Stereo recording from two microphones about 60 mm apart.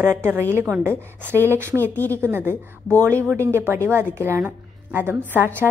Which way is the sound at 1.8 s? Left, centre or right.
Left.